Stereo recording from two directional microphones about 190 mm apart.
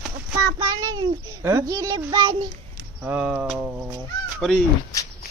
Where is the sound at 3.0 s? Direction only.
10° right (ahead or behind).